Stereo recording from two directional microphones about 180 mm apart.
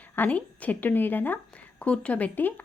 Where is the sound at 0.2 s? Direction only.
10° left (ahead or behind).